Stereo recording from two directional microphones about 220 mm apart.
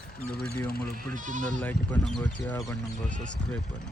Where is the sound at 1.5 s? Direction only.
10° left (ahead or behind).